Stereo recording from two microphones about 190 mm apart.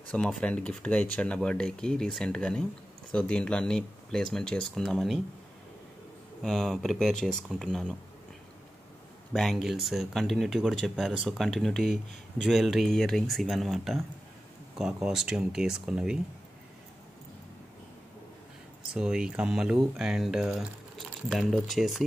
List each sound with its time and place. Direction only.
0.1 s speech: 5° left (ahead or behind)
6.4 s speech: centre (ahead or behind)
9.3 s speech: centre (ahead or behind)
18.9 s speech: 5° right (ahead or behind)